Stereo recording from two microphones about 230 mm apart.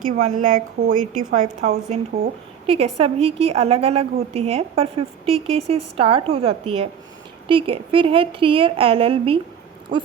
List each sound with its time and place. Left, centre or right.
0.0 s a woman's voice: right